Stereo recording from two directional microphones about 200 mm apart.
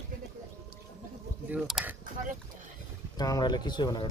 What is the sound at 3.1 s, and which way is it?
Speech, 20° left (ahead or behind).